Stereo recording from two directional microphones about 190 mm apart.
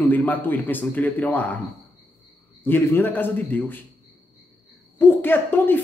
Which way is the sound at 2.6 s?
10° left (ahead or behind).